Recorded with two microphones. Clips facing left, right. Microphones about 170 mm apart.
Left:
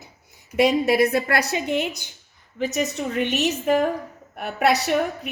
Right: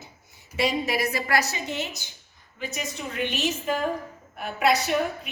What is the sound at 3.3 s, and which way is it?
A woman's voice, 70° left (ahead or behind).